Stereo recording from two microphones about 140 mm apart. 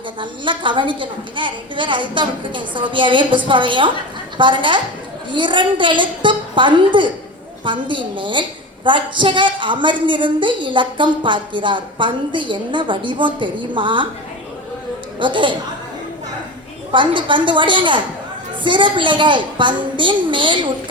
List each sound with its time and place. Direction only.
0.2 s a woman's voice: 35° right (ahead or behind)
15.2 s a woman's voice: 35° right (ahead or behind)
16.9 s a woman's voice: 35° right (ahead or behind)